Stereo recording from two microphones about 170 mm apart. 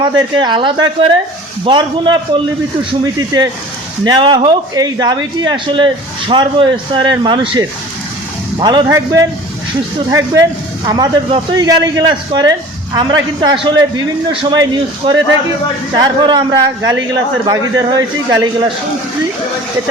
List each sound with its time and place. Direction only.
0.0 s a man's voice: 25° right (ahead or behind)